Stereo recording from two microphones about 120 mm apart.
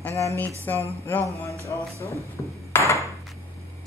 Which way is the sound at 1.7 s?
30° left (ahead or behind).